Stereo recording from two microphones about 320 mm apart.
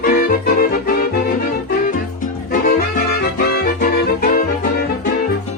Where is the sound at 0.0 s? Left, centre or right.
Left.